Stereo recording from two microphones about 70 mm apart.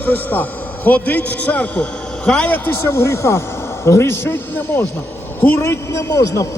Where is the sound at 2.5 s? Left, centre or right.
Left.